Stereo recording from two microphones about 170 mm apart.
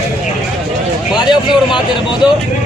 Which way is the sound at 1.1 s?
25° left (ahead or behind).